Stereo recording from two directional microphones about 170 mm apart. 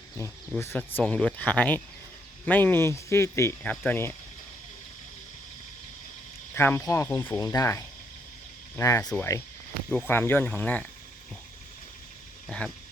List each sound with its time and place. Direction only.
0.2 s speech: 20° left (ahead or behind)
6.5 s speech: 15° left (ahead or behind)
12.5 s speech: 5° left (ahead or behind)